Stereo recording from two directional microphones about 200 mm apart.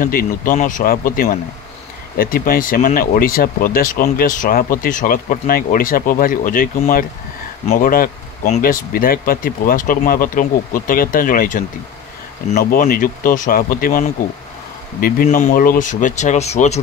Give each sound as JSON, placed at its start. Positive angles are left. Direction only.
{"t": 0.0, "sound": "speech", "side_deg": 45}